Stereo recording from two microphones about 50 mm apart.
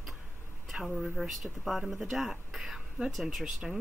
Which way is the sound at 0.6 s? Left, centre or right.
Centre.